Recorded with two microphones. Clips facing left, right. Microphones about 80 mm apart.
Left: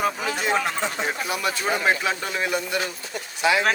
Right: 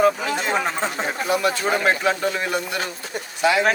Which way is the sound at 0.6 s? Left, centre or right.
Right.